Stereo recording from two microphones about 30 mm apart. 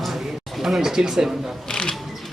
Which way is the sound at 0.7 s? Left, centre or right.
Centre.